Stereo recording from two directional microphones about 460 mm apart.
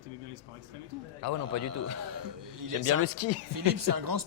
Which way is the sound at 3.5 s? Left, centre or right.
Right.